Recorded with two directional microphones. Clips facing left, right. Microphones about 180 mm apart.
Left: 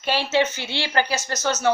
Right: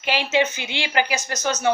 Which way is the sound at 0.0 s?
15° right (ahead or behind).